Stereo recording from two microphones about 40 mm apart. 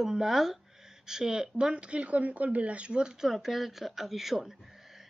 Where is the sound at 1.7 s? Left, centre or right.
Right.